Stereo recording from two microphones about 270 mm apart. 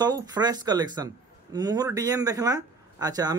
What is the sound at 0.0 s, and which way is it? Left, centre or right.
A man's voice, centre.